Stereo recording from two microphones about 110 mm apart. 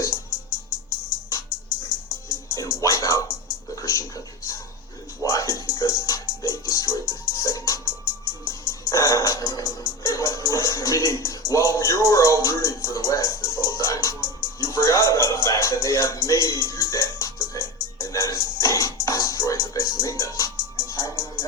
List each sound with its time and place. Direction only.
0.0 s music: 30° left (ahead or behind)
2.3 s music: 30° left (ahead or behind)
3.8 s a sound: 30° left (ahead or behind)
5.2 s music: 30° left (ahead or behind)